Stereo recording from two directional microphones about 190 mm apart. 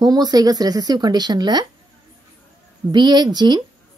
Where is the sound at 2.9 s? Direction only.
20° right (ahead or behind).